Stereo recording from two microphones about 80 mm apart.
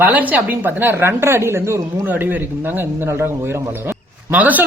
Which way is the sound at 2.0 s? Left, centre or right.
Right.